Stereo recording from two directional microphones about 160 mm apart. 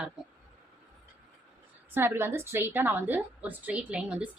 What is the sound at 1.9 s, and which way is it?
A woman's voice, 15° right (ahead or behind).